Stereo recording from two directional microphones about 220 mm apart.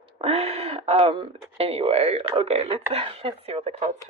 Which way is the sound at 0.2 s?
25° right (ahead or behind).